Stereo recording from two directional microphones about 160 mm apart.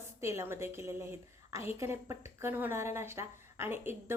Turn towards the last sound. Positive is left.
turn(degrees=-15)  # may be behind; listen again after turning